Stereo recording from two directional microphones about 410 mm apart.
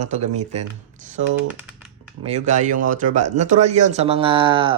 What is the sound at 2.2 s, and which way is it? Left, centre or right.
Speech, centre.